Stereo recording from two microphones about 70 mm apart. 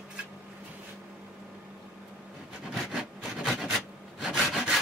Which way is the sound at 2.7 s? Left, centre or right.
Centre.